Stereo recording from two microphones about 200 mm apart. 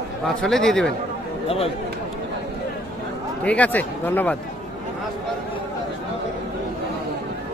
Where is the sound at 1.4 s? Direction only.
30° left (ahead or behind).